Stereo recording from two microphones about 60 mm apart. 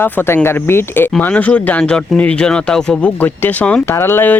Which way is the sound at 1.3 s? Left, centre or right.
Left.